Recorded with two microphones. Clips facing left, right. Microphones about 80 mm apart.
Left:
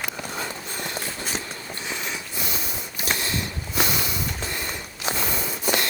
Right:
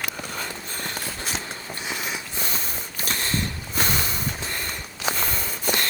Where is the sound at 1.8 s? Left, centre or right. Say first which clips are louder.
Right 1 dB; centre.